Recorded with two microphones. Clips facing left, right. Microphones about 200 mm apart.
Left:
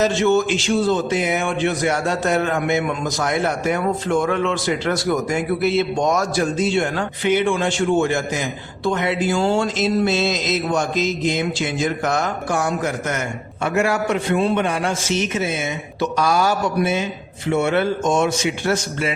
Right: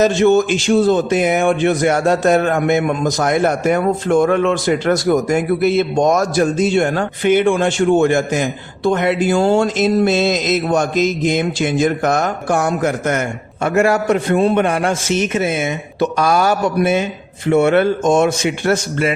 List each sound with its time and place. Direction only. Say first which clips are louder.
0.3 s a man's voice: right 4 dB; 15° right (ahead or behind)
0.7 s a man's voice: right 6 dB; 50° right (ahead or behind)